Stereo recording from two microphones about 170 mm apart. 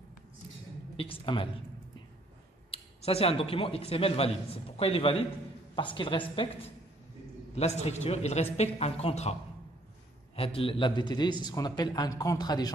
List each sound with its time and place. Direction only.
0.9 s a man's voice: 30° left (ahead or behind)
2.7 s a man's voice: 35° left (ahead or behind)
7.5 s a man's voice: 40° left (ahead or behind); by 12.7 s 25° left (ahead or behind)